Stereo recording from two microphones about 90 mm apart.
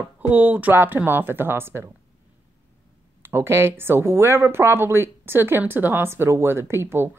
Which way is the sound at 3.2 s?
25° right (ahead or behind).